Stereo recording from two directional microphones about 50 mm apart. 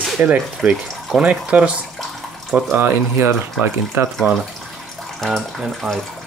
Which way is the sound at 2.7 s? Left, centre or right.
Right.